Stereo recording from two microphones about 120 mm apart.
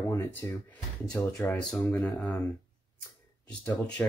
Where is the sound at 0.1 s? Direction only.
15° left (ahead or behind).